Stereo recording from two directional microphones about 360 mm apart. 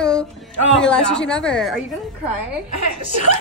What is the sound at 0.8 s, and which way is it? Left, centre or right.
Speech, centre.